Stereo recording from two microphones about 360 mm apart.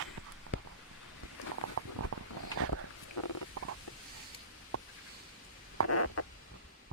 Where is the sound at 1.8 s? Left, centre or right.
Right.